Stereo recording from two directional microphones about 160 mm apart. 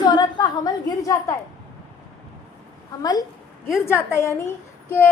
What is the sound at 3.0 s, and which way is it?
A woman's voice, 25° left (ahead or behind).